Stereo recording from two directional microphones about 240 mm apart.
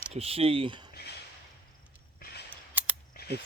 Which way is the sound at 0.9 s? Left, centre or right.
Left.